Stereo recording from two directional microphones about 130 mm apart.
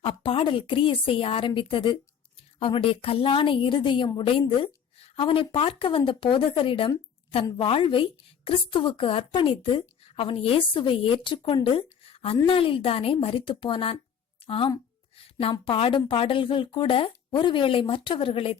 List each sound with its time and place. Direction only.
0.0 s a woman's voice: 40° left (ahead or behind)
15.2 s a sound: 45° left (ahead or behind)
15.6 s a woman's voice: 40° left (ahead or behind)